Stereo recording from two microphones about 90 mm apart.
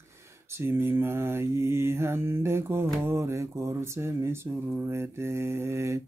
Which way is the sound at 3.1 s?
30° right (ahead or behind).